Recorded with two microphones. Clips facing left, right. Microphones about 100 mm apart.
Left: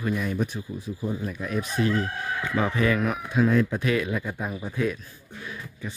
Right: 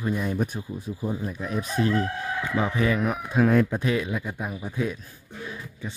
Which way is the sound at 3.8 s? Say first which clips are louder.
Left 1 dB; 20° right (ahead or behind).